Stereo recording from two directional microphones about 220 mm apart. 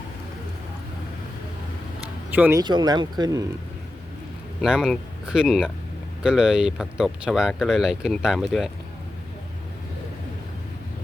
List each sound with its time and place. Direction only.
2.3 s speech: 10° right (ahead or behind)
4.6 s speech: 5° right (ahead or behind)